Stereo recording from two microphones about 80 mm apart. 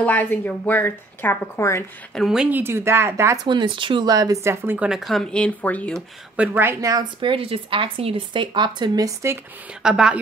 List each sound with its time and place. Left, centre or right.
0.0 s a woman's voice: centre; by 1.9 s left
2.2 s speech: centre
2.5 s speech: right
3.4 s speech: right
4.1 s speech: right
4.7 s speech: centre
5.3 s speech: centre
6.5 s a woman's voice: right
6.8 s speech: right
7.2 s speech: right
9.0 s speech: right
9.8 s a woman's voice: centre